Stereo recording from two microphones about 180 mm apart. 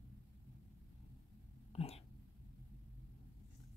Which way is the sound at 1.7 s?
35° left (ahead or behind).